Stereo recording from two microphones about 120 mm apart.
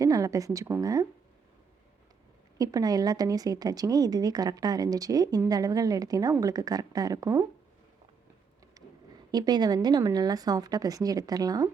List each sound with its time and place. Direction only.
0.0 s a woman's voice: 25° right (ahead or behind)
2.6 s speech: 30° right (ahead or behind)
8.8 s a sound: 30° right (ahead or behind)
9.3 s speech: 35° right (ahead or behind)